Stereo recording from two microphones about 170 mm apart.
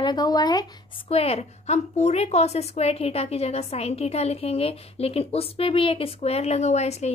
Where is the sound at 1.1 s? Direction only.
35° left (ahead or behind).